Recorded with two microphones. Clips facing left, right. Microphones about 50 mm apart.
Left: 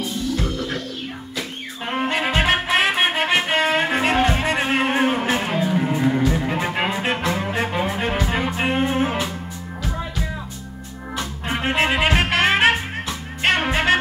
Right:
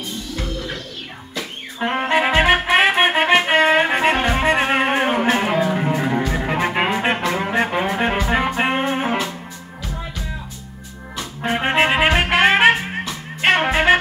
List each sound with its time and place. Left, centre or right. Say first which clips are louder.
1.9 s music: right 4 dB; centre
5.9 s music: left 1 dB; right
11.4 s music: right 4 dB; right